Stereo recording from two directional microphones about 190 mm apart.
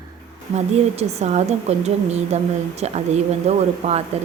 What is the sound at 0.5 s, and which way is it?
A woman's voice, 35° right (ahead or behind).